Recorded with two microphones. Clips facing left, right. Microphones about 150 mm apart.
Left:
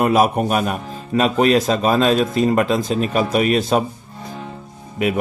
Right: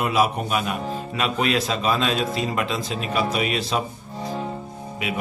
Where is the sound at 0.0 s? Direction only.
50° left (ahead or behind).